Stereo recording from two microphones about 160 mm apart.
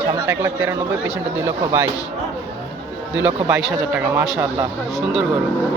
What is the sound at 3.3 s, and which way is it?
Speech, 10° right (ahead or behind).